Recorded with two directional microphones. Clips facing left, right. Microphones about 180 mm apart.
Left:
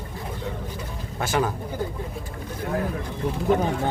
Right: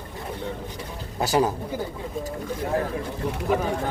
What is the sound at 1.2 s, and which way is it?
Speech, 35° right (ahead or behind).